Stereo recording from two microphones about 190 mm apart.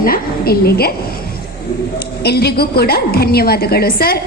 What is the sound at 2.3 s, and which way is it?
A woman's voice, 55° left (ahead or behind).